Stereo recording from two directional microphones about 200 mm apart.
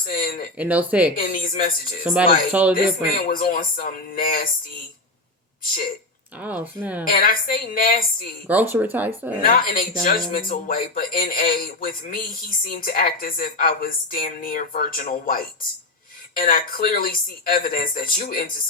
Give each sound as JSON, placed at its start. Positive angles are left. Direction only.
{"t": 0.0, "sound": "a sound", "side_deg": 45}
{"t": 0.5, "sound": "speech", "side_deg": -5}
{"t": 1.1, "sound": "a sound", "side_deg": 45}
{"t": 2.5, "sound": "speech", "side_deg": -5}
{"t": 2.7, "sound": "speech", "side_deg": 45}
{"t": 6.4, "sound": "speech", "side_deg": -10}
{"t": 7.0, "sound": "speech", "side_deg": 45}
{"t": 8.4, "sound": "speech", "side_deg": -10}
{"t": 9.4, "sound": "speech", "side_deg": 45}